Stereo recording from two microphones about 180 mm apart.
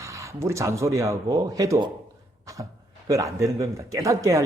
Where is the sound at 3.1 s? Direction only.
15° right (ahead or behind).